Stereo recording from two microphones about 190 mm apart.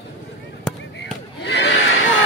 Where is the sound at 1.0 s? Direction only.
65° left (ahead or behind).